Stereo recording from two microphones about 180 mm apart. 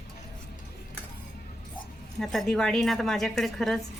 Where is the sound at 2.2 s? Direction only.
Centre (ahead or behind).